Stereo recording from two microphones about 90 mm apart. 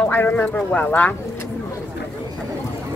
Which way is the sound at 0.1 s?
20° left (ahead or behind).